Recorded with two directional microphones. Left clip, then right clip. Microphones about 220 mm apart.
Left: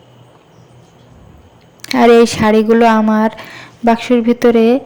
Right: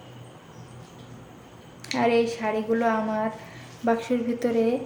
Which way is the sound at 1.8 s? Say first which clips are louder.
Left 14 dB; 45° left (ahead or behind).